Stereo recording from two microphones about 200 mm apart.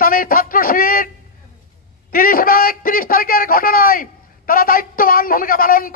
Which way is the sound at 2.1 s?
45° left (ahead or behind).